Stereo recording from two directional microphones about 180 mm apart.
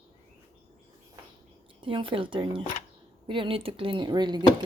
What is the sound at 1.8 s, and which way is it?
Speech, 30° right (ahead or behind).